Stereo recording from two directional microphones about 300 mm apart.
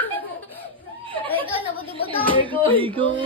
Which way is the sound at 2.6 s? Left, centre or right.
Centre.